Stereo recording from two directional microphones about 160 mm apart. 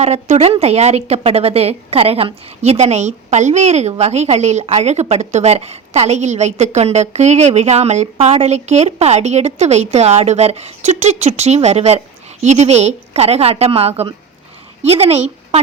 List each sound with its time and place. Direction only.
0.0 s a woman's voice: 45° right (ahead or behind)